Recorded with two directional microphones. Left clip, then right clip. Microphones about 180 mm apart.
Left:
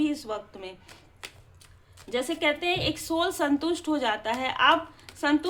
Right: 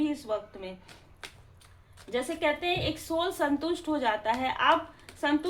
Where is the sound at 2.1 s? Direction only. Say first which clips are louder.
Left 2 dB; 30° left (ahead or behind).